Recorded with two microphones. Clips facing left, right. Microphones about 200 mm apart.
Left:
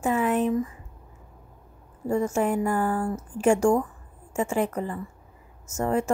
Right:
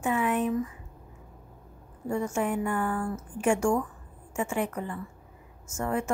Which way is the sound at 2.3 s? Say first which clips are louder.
Left 4 dB; 35° left (ahead or behind).